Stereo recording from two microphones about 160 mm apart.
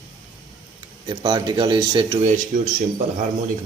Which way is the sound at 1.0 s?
30° right (ahead or behind).